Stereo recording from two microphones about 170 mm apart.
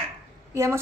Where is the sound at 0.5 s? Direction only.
15° right (ahead or behind).